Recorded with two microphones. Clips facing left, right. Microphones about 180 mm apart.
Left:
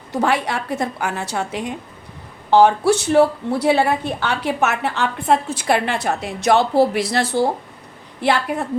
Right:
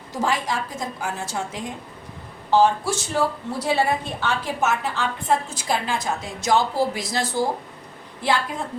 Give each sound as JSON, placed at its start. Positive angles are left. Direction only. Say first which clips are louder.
{"t": 0.1, "sound": "a woman's voice", "louder": "left 5 dB", "side_deg": 65}